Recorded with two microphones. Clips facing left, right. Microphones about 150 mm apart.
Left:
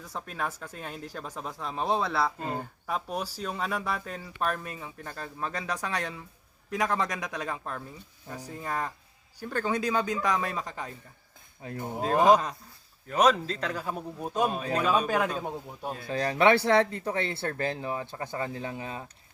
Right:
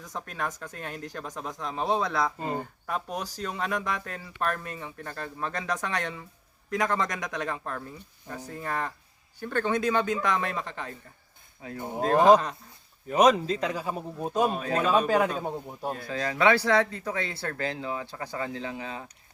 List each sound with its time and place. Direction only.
0.0 s speech: 5° left (ahead or behind)
11.9 s speech: 10° left (ahead or behind)
13.1 s a man's voice: 10° right (ahead or behind)
16.1 s speech: 30° left (ahead or behind)